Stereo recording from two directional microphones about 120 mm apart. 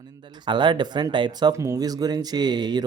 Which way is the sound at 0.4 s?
40° right (ahead or behind).